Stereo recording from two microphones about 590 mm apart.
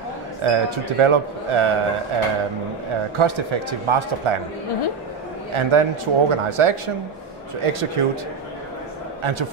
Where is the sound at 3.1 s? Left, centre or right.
Right.